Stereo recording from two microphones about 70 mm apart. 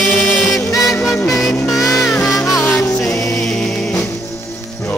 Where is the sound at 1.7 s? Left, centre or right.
Left.